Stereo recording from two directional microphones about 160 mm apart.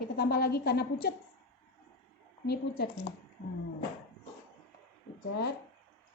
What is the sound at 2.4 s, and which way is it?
Speech, 90° left.